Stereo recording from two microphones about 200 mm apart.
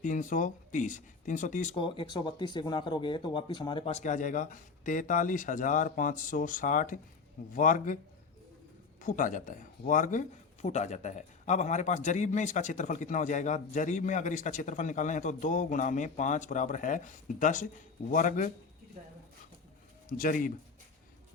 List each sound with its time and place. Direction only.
0.0 s speech: 40° left (ahead or behind)
1.8 s speech: 25° left (ahead or behind); by 7.9 s 40° left (ahead or behind)
9.0 s speech: 40° left (ahead or behind)
20.1 s a man's voice: 45° left (ahead or behind)